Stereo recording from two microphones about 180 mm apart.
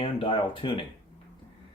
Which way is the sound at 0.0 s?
30° left (ahead or behind).